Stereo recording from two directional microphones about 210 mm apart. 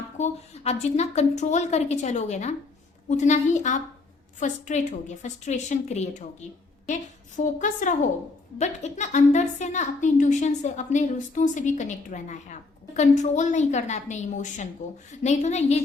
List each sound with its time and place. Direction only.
0.2 s a woman's voice: 30° left (ahead or behind)